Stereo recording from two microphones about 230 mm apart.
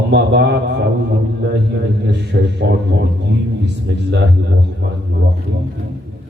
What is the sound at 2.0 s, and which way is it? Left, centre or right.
Speech, right.